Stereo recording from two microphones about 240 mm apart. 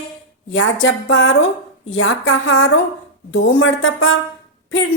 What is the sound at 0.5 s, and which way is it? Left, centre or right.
A woman's voice, left.